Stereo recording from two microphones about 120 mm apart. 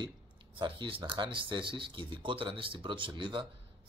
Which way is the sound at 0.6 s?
45° right (ahead or behind).